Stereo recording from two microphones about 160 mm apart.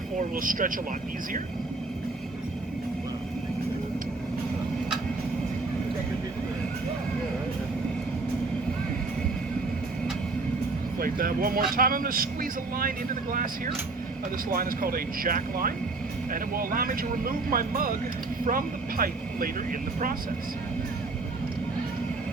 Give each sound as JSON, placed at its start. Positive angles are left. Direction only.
{"t": 0.2, "sound": "speech", "side_deg": -55}
{"t": 11.0, "sound": "speech", "side_deg": -60}
{"t": 14.5, "sound": "speech", "side_deg": -65}